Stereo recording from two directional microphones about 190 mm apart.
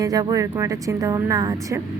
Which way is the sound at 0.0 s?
20° right (ahead or behind).